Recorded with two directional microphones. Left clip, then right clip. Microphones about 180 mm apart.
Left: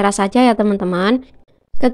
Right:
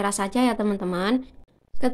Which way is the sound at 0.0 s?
45° left (ahead or behind).